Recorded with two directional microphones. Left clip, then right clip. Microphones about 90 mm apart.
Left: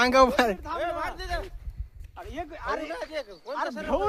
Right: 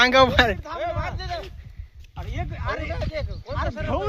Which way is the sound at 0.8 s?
55° left (ahead or behind).